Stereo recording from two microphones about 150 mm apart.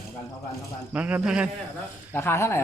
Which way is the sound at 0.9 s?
10° right (ahead or behind).